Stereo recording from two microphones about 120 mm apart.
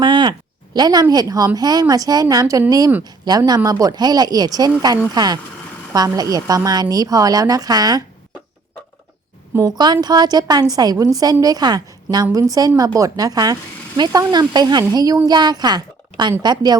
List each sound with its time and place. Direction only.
0.0 s a sound: 40° right (ahead or behind)
1.1 s speech: 30° right (ahead or behind)
9.6 s a woman's voice: 35° right (ahead or behind)